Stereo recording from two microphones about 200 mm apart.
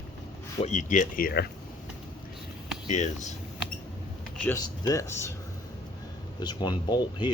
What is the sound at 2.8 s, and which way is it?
Speech, 35° left (ahead or behind).